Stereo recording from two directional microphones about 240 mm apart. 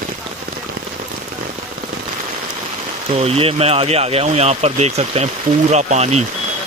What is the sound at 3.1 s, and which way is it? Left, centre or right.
Speech, right.